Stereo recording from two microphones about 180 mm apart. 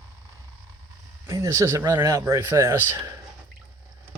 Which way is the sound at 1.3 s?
15° right (ahead or behind).